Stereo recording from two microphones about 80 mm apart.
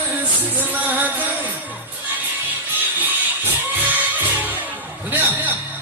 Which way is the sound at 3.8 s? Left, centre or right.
Right.